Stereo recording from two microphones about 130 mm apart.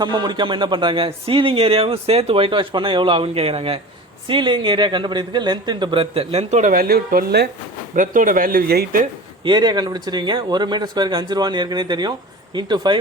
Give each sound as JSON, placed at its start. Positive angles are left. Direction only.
{"t": 0.0, "sound": "a man's voice", "side_deg": -35}
{"t": 9.4, "sound": "a man's voice", "side_deg": -35}